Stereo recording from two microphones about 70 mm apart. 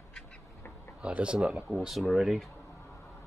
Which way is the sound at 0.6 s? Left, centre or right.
Left.